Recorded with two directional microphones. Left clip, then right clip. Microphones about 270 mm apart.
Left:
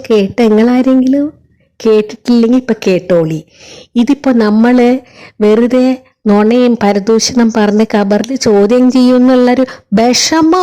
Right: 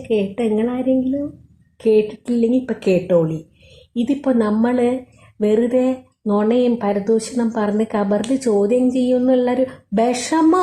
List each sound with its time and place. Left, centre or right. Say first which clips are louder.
0.1 s speech: left 10 dB; left